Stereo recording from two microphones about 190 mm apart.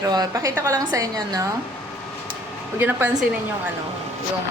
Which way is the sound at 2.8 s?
10° right (ahead or behind).